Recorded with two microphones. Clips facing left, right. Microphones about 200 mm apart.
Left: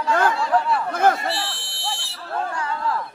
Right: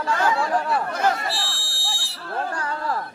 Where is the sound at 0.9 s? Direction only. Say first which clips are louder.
Left 6 dB; 55° left (ahead or behind).